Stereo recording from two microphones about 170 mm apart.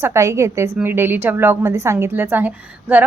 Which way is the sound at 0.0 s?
15° right (ahead or behind).